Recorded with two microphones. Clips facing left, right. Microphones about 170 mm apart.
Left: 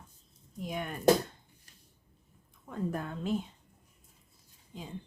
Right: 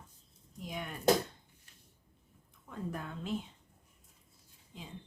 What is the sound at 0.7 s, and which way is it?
Speech, 50° left (ahead or behind).